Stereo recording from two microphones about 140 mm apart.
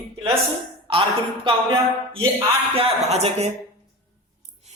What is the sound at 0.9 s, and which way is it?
Speech, 40° right (ahead or behind).